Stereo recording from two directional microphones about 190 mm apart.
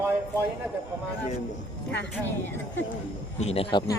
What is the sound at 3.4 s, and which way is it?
Speech, 30° left (ahead or behind).